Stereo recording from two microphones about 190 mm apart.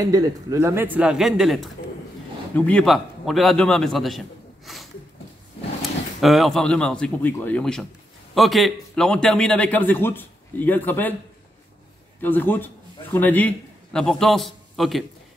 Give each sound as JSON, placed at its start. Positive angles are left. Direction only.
{"t": 0.0, "sound": "a man's voice", "side_deg": -15}
{"t": 12.2, "sound": "a man's voice", "side_deg": 10}